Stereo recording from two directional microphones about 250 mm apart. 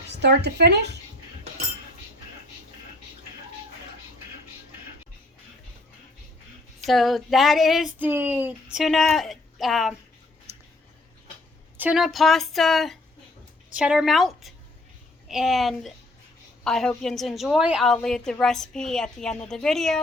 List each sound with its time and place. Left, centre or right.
0.1 s speech: right
6.8 s a woman's voice: centre
11.8 s a woman's voice: centre